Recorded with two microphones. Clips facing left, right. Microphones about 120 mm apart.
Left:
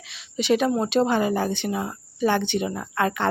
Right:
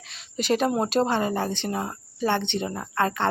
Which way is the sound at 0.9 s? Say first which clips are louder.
Left 4 dB; 20° right (ahead or behind).